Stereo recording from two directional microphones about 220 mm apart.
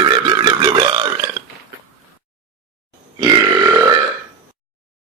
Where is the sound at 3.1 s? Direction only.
20° right (ahead or behind).